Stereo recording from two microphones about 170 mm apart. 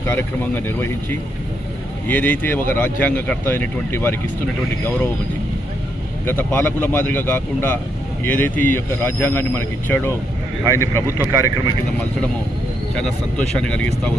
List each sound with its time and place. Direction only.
0.0 s speech: 15° left (ahead or behind)
2.0 s speech: 10° left (ahead or behind)
6.2 s speech: 15° left (ahead or behind)
11.2 s speech: 15° right (ahead or behind)
13.0 s speech: 5° left (ahead or behind)